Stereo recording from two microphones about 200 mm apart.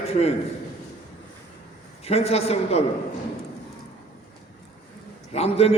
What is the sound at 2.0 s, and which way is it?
Speech, 30° left (ahead or behind).